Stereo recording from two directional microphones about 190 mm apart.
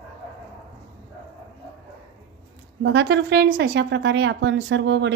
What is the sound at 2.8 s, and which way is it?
A woman's voice, 65° right (ahead or behind).